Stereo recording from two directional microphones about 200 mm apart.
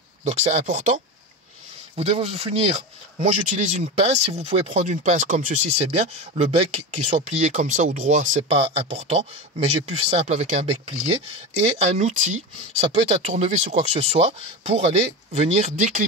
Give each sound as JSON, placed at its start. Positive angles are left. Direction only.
{"t": 0.2, "sound": "speech", "side_deg": -35}